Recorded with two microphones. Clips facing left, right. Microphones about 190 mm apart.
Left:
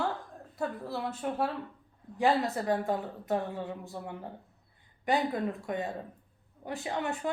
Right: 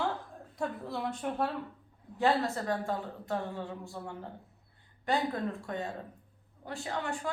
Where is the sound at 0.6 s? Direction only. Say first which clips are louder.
Left 1 dB; centre (ahead or behind).